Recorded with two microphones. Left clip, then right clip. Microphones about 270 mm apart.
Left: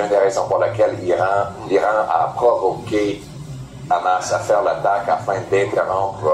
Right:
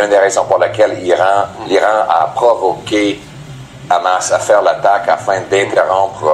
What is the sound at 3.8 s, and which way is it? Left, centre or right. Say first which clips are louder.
A man's voice: right 5 dB; right.